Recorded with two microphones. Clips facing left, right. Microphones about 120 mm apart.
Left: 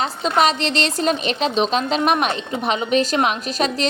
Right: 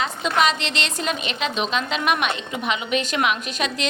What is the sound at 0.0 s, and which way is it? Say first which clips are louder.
A woman's voice: left 3 dB; 35° left (ahead or behind).